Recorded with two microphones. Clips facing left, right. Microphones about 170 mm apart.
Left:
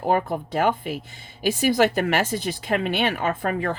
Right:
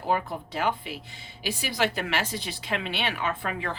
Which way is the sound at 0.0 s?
50° left (ahead or behind).